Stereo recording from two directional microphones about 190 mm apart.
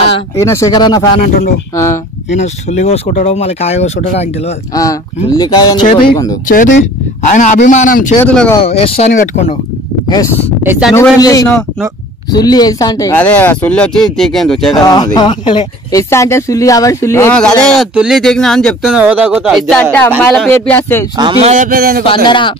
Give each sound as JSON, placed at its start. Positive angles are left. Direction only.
{"t": 0.4, "sound": "speech", "side_deg": 15}
{"t": 2.3, "sound": "speech", "side_deg": 35}
{"t": 4.7, "sound": "speech", "side_deg": 20}
{"t": 6.4, "sound": "speech", "side_deg": 45}
{"t": 8.2, "sound": "speech", "side_deg": 10}
{"t": 8.5, "sound": "speech", "side_deg": 30}
{"t": 9.1, "sound": "speech", "side_deg": 45}
{"t": 10.6, "sound": "speech", "side_deg": -10}
{"t": 11.0, "sound": "speech", "side_deg": 20}
{"t": 14.7, "sound": "speech", "side_deg": 20}
{"t": 19.7, "sound": "speech", "side_deg": 5}
{"t": 21.2, "sound": "speech", "side_deg": -30}
{"t": 21.6, "sound": "speech", "side_deg": -50}
{"t": 22.0, "sound": "speech", "side_deg": 25}